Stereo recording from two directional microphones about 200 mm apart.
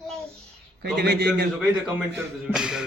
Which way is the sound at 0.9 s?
55° right (ahead or behind).